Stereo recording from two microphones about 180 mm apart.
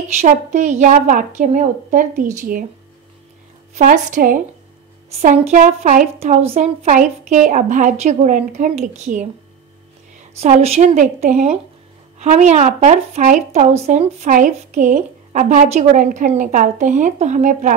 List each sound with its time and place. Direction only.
0.1 s a woman's voice: 45° right (ahead or behind)
3.7 s a woman's voice: 45° right (ahead or behind)
10.4 s a woman's voice: 35° right (ahead or behind)